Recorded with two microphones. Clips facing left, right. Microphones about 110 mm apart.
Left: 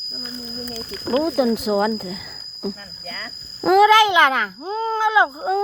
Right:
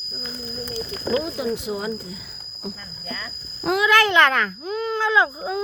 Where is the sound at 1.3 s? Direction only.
65° left (ahead or behind).